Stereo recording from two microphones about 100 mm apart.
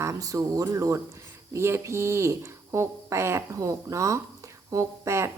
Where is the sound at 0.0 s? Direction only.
35° right (ahead or behind).